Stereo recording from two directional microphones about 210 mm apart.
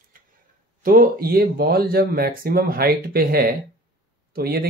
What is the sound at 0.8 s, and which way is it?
Speech, 40° right (ahead or behind).